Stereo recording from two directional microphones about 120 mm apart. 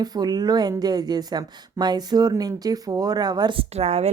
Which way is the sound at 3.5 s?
60° right (ahead or behind).